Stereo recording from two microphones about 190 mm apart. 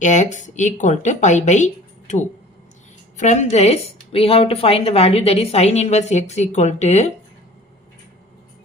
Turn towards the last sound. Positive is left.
turn(degrees=35)  # may be behind; listen again after turning